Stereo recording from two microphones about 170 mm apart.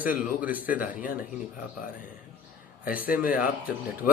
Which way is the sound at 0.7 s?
55° left (ahead or behind).